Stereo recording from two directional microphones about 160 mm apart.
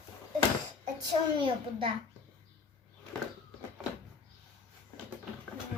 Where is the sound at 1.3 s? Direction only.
35° right (ahead or behind).